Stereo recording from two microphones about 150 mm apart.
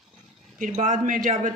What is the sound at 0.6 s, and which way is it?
Speech, 55° right (ahead or behind).